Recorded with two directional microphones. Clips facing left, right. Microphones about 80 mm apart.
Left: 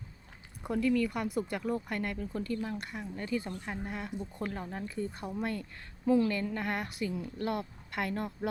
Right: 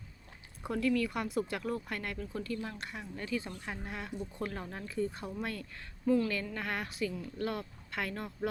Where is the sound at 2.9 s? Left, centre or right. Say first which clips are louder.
Left 1 dB; centre.